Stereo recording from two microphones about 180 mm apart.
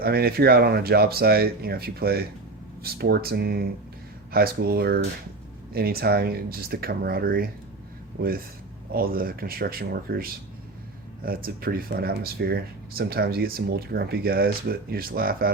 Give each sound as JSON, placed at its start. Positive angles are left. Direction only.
{"t": 0.0, "sound": "speech", "side_deg": -60}
{"t": 8.9, "sound": "speech", "side_deg": -55}